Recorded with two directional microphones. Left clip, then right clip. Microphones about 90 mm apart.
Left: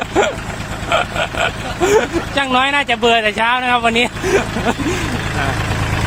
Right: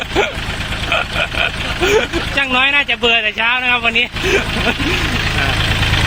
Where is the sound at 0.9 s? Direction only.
35° left (ahead or behind).